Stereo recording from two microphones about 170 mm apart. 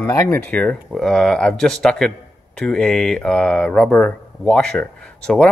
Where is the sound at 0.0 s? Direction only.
15° left (ahead or behind).